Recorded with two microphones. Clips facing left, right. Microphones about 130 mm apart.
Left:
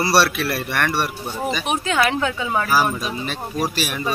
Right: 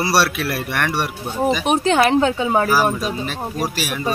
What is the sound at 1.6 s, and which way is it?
Speech, 35° right (ahead or behind).